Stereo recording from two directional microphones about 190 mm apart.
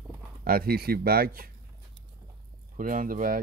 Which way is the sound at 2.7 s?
45° right (ahead or behind).